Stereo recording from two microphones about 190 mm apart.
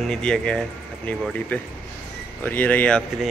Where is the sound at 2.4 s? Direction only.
10° left (ahead or behind).